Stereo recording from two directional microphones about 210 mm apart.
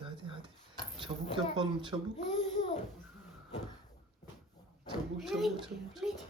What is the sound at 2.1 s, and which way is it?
Speech, 30° left (ahead or behind).